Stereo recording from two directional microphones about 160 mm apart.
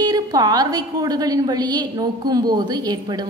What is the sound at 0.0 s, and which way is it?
A woman's voice, 25° right (ahead or behind).